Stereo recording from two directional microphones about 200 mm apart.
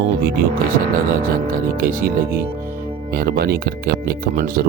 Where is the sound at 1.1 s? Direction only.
45° right (ahead or behind).